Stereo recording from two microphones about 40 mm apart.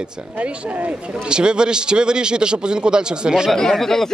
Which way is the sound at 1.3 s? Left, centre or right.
Right.